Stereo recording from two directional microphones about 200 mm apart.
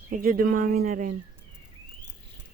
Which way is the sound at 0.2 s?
45° right (ahead or behind).